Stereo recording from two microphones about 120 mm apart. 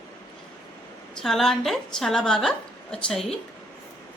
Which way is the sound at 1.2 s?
5° left (ahead or behind).